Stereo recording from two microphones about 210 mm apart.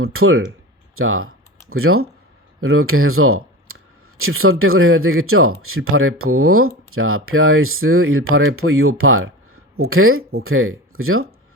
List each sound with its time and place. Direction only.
0.0 s speech: 85° right